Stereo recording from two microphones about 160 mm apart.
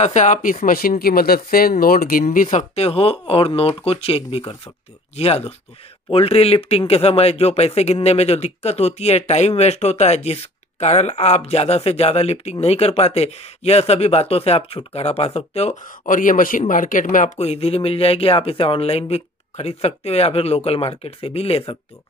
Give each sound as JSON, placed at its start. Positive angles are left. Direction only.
{"t": 0.0, "sound": "speech", "side_deg": 50}
{"t": 16.1, "sound": "speech", "side_deg": 55}